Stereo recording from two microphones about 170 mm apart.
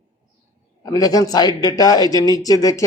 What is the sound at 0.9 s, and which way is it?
Speech, 20° left (ahead or behind).